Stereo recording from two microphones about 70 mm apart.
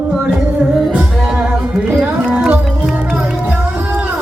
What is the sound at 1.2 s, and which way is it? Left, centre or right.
Music, centre.